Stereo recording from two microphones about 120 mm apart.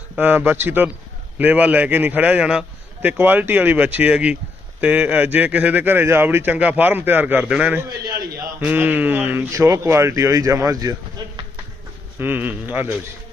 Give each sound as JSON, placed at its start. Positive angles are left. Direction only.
{"t": 0.2, "sound": "speech", "side_deg": -15}
{"t": 9.5, "sound": "speech", "side_deg": -25}
{"t": 12.2, "sound": "speech", "side_deg": -15}